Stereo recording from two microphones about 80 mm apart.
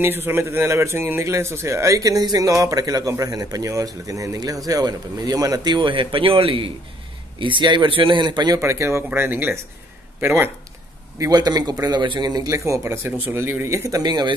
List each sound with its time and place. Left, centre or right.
0.0 s a man's voice: right
8.5 s speech: right
11.1 s a man's voice: right
11.9 s a man's voice: right
12.4 s speech: right
14.0 s a man's voice: right